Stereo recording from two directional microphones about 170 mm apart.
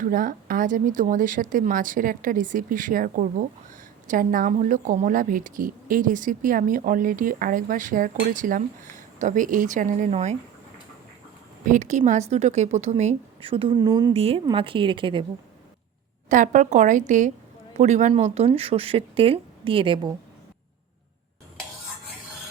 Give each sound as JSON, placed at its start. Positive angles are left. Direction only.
{"t": 0.0, "sound": "a woman's voice", "side_deg": -55}
{"t": 11.7, "sound": "a woman's voice", "side_deg": -45}
{"t": 16.3, "sound": "a woman's voice", "side_deg": -50}